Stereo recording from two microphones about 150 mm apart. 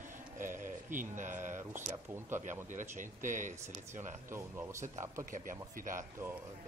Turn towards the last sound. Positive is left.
turn(degrees=-65)  # may be behind; listen again after turning